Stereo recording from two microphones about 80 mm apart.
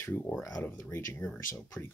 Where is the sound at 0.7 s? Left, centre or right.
Left.